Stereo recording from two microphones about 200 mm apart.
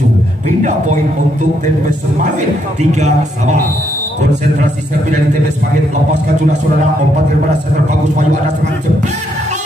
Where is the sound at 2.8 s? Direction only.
35° right (ahead or behind).